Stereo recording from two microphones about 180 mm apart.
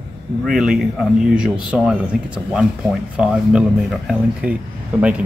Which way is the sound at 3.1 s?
5° right (ahead or behind).